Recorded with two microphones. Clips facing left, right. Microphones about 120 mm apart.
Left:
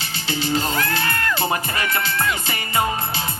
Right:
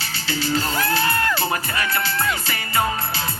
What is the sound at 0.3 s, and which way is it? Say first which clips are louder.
Music: left 1 dB; 20° left (ahead or behind).